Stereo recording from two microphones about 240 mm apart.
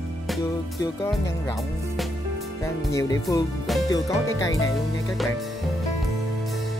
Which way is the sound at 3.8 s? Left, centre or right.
Centre.